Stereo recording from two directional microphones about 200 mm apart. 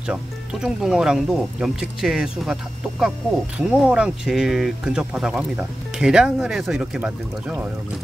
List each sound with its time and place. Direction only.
0.0 s speech: 5° right (ahead or behind)